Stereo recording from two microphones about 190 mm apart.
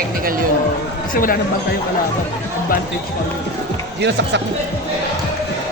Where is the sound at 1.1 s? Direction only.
50° left (ahead or behind).